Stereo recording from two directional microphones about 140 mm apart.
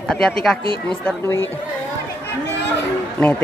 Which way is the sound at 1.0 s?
15° left (ahead or behind).